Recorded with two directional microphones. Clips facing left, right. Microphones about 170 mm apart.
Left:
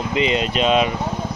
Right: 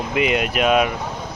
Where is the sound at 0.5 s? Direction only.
25° left (ahead or behind).